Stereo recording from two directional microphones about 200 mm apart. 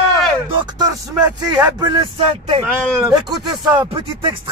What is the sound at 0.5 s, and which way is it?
Speech, 20° right (ahead or behind).